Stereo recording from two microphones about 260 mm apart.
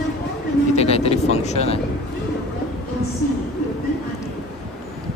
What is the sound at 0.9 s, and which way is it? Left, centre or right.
Speech, left.